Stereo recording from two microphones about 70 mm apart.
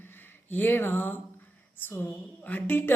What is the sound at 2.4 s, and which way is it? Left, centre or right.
Speech, left.